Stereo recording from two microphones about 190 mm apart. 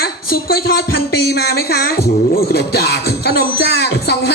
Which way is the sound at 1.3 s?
55° left (ahead or behind).